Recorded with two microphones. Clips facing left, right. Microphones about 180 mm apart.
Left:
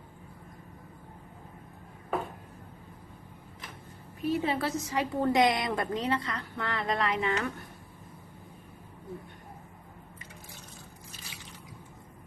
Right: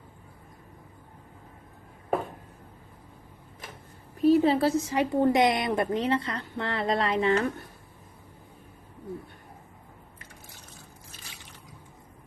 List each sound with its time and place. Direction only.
4.2 s a woman's voice: 35° right (ahead or behind)